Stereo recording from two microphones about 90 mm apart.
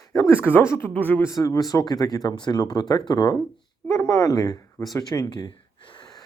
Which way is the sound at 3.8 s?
35° left (ahead or behind).